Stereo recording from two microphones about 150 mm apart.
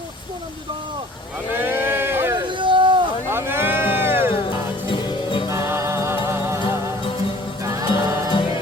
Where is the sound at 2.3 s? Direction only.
35° right (ahead or behind).